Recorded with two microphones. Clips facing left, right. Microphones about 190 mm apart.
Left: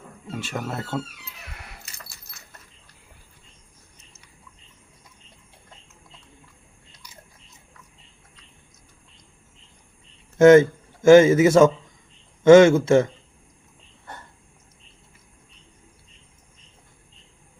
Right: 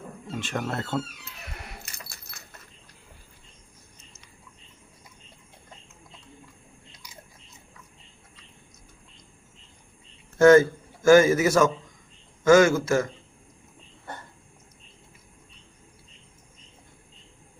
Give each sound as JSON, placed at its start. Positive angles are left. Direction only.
{"t": 0.3, "sound": "speech", "side_deg": 10}
{"t": 1.8, "sound": "keys jangling", "side_deg": -55}
{"t": 10.3, "sound": "a man's voice", "side_deg": 20}